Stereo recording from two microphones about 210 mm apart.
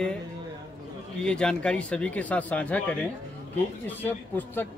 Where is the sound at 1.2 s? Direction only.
5° left (ahead or behind).